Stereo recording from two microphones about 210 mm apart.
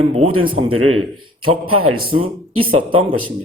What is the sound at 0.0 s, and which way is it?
Speech, 30° right (ahead or behind).